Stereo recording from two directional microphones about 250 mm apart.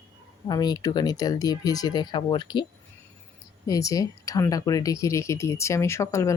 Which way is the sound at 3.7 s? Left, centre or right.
Centre.